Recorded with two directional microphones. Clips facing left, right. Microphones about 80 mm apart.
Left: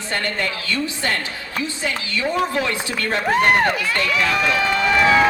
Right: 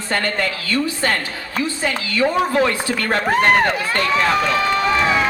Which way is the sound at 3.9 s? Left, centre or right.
Right.